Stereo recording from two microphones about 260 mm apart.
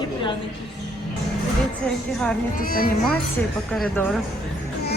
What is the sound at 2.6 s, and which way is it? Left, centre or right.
Speech, left.